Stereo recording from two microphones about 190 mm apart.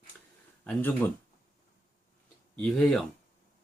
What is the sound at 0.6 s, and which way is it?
Speech, 10° left (ahead or behind).